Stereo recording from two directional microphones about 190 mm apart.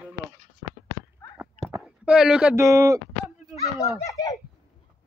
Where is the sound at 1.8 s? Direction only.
5° right (ahead or behind).